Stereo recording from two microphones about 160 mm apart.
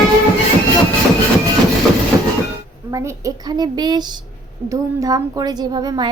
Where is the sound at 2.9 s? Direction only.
20° right (ahead or behind).